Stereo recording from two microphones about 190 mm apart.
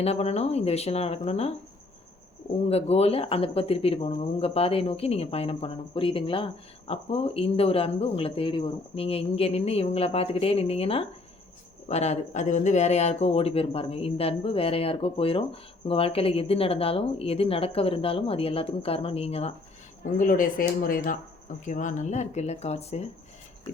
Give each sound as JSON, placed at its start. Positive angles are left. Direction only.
{"t": 0.0, "sound": "speech", "side_deg": 35}
{"t": 2.6, "sound": "speech", "side_deg": 30}
{"t": 20.1, "sound": "speech", "side_deg": 45}